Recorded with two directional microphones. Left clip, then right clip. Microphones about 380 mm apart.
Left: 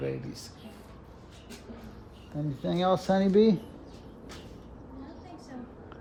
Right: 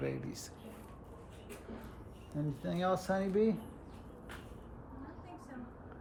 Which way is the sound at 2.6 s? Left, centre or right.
Centre.